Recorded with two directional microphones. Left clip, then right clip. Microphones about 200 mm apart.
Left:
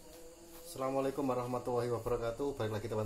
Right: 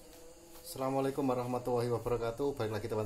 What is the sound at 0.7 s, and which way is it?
Speech, 35° right (ahead or behind).